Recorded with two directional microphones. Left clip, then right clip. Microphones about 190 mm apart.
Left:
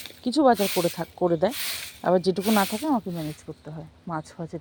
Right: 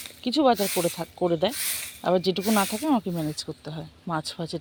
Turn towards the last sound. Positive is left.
turn(degrees=-20)  # may be behind; listen again after turning